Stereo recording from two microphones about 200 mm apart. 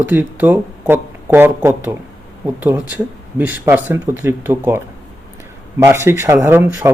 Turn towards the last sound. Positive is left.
turn(degrees=-10)  # may be behind; listen again after turning